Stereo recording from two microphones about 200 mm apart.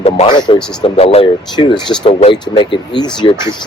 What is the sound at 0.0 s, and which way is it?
A man's voice, 25° left (ahead or behind).